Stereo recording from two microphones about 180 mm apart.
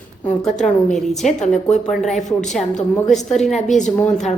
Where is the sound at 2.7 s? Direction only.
40° left (ahead or behind).